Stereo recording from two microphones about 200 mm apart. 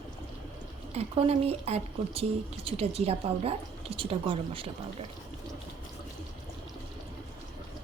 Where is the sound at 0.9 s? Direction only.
30° right (ahead or behind).